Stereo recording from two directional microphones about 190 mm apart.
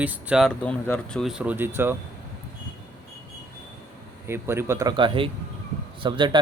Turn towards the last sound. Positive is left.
turn(degrees=-25)  # may be behind; listen again after turning